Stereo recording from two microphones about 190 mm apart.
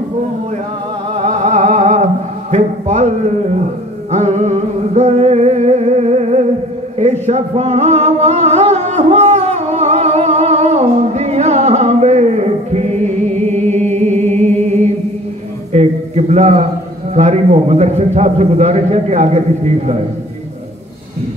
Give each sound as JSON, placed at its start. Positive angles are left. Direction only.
{"t": 1.1, "sound": "music", "side_deg": -40}
{"t": 2.5, "sound": "speech", "side_deg": -40}
{"t": 4.1, "sound": "music", "side_deg": -40}
{"t": 15.7, "sound": "a sound", "side_deg": -35}
{"t": 17.1, "sound": "a man's voice", "side_deg": -35}